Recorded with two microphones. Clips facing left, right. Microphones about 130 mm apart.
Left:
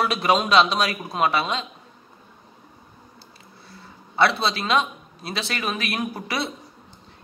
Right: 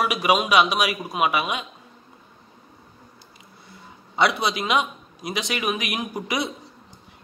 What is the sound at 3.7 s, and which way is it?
A man's voice, 15° right (ahead or behind).